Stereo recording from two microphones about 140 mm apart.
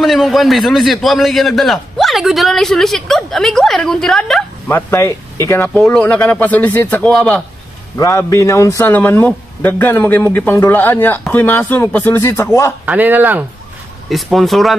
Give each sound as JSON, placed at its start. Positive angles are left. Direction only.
{"t": 0.0, "sound": "a man's voice", "side_deg": 0}
{"t": 4.6, "sound": "speech", "side_deg": 20}
{"t": 5.7, "sound": "a man's voice", "side_deg": 5}
{"t": 8.0, "sound": "a man's voice", "side_deg": 20}
{"t": 12.8, "sound": "speech", "side_deg": -10}
{"t": 14.0, "sound": "a man's voice", "side_deg": 0}